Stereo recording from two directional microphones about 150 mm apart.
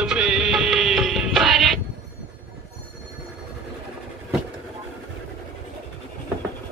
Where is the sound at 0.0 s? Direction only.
5° right (ahead or behind).